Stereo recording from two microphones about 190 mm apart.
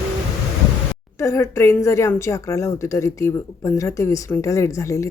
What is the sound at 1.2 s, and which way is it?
Speech, 15° left (ahead or behind).